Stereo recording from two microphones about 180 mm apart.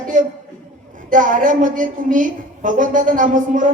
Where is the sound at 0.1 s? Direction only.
45° right (ahead or behind).